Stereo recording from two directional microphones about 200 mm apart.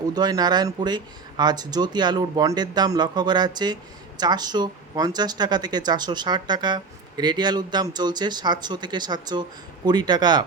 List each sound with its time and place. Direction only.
0.1 s speech: 20° right (ahead or behind)